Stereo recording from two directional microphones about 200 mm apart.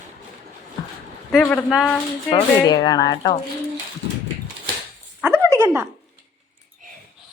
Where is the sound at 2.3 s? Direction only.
20° left (ahead or behind).